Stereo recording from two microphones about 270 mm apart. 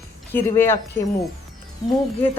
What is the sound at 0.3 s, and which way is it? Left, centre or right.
Speech, centre.